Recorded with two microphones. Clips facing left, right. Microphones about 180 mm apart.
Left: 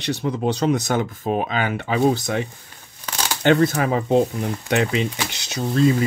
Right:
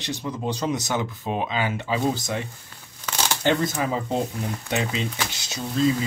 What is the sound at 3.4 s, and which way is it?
Speech, 65° left (ahead or behind).